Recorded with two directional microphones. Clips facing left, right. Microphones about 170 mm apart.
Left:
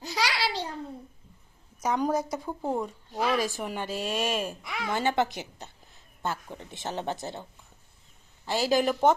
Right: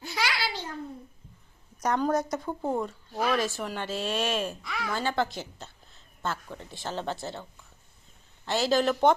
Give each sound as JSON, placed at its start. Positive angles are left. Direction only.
{"t": 0.0, "sound": "a sound", "side_deg": 35}
{"t": 1.8, "sound": "speech", "side_deg": 5}
{"t": 8.4, "sound": "speech", "side_deg": 10}